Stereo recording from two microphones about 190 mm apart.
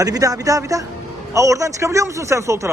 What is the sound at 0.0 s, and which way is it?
A man's voice, 20° right (ahead or behind).